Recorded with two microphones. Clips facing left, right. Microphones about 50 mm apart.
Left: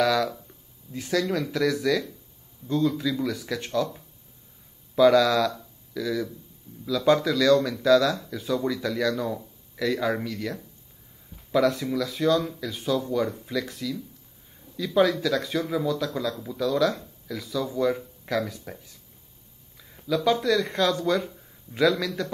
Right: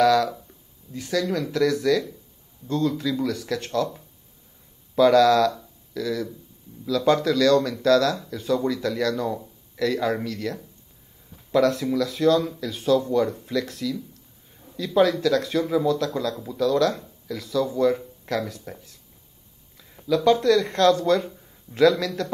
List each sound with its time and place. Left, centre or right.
0.9 s speech: left
1.3 s speech: centre
4.9 s speech: centre